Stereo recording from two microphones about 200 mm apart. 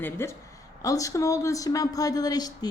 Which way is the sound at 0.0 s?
10° left (ahead or behind).